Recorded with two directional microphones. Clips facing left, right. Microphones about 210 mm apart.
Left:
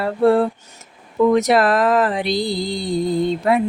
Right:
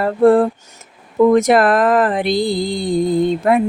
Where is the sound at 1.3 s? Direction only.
50° right (ahead or behind).